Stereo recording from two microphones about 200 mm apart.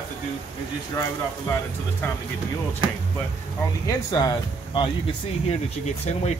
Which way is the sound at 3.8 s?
20° left (ahead or behind).